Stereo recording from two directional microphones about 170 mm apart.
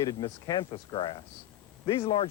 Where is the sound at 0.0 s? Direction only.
20° left (ahead or behind).